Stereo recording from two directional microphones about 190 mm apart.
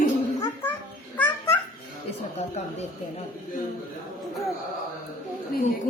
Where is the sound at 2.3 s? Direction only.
35° left (ahead or behind).